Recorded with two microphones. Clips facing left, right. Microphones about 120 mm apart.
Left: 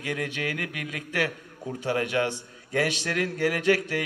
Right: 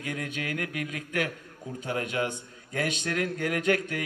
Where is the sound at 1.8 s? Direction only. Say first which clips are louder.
Left 4 dB; 75° left (ahead or behind).